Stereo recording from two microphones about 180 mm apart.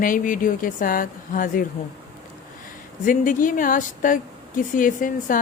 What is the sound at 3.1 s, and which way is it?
Speech, 50° left (ahead or behind).